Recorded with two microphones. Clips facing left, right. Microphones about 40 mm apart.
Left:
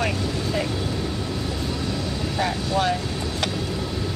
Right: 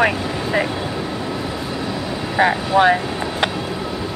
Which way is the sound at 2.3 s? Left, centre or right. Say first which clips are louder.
Right 9 dB; right.